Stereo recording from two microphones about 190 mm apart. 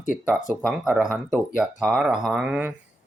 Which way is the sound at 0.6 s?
5° right (ahead or behind).